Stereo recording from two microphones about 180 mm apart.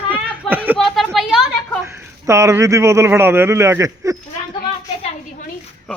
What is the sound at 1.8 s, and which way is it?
A man's voice, 15° right (ahead or behind).